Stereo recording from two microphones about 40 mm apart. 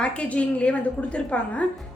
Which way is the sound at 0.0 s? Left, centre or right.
Left.